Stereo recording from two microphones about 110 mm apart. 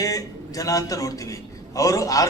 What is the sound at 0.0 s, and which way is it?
A man's voice, 30° left (ahead or behind).